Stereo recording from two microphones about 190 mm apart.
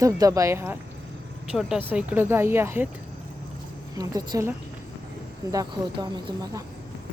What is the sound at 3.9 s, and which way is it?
Speech, 20° right (ahead or behind).